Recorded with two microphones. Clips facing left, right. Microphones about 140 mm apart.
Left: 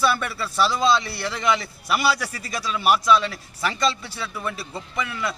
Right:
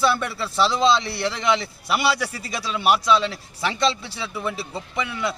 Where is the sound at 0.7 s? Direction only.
Centre (ahead or behind).